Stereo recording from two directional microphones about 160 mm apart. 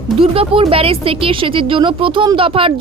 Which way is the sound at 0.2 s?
35° right (ahead or behind).